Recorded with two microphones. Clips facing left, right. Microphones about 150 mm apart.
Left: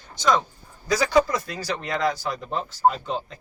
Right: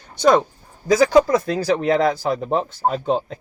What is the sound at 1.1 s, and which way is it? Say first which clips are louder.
Speech: right 6 dB; 50° right (ahead or behind).